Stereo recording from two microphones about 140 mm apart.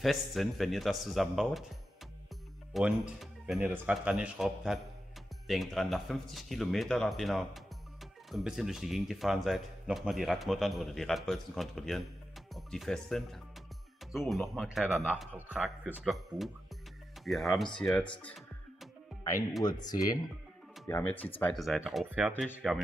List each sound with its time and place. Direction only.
0.0 s speech: centre (ahead or behind)
2.7 s speech: centre (ahead or behind)
3.6 s a man's voice: 10° right (ahead or behind)
16.0 s speech: centre (ahead or behind)
19.6 s speech: 30° left (ahead or behind)
20.8 s speech: 15° left (ahead or behind)
21.5 s a man's voice: centre (ahead or behind)